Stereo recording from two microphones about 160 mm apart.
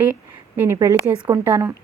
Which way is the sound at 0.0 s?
10° right (ahead or behind).